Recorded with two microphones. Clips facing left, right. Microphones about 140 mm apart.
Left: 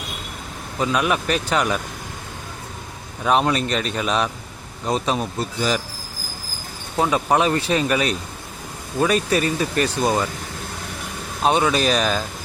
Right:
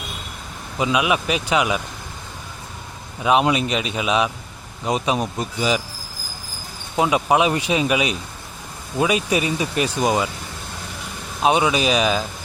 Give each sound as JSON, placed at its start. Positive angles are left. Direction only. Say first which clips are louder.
{"t": 0.8, "sound": "speech", "louder": "right 1 dB", "side_deg": -5}
{"t": 3.2, "sound": "speech", "louder": "right 1 dB", "side_deg": -5}
{"t": 6.9, "sound": "speech", "louder": "right 1 dB", "side_deg": -10}
{"t": 11.4, "sound": "speech", "louder": "even", "side_deg": -10}